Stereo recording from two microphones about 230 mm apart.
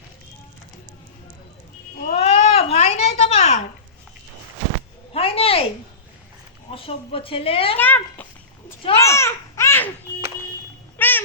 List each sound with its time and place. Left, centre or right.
2.0 s cat: left
5.1 s a sound: left
6.7 s a woman's voice: left
7.8 s a child's voice: centre
9.0 s babbling: centre
10.9 s a sound: centre